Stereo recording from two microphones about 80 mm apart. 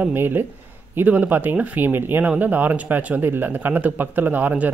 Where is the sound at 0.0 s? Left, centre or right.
Right.